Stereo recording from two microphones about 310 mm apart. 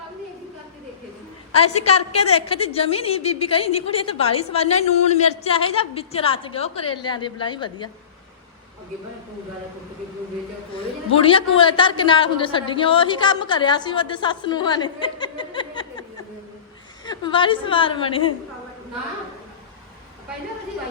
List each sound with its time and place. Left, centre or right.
1.8 s a woman's voice: centre
11.3 s a woman's voice: centre